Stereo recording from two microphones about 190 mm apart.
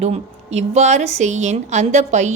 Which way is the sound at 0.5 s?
35° right (ahead or behind).